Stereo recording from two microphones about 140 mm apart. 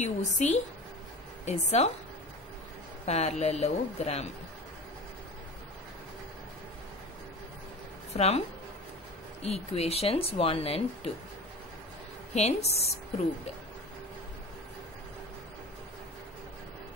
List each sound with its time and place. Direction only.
0.0 s a woman's voice: 55° left (ahead or behind)
3.1 s speech: 50° left (ahead or behind)
8.1 s speech: 50° left (ahead or behind)
9.4 s speech: 45° left (ahead or behind)
12.4 s speech: 50° left (ahead or behind)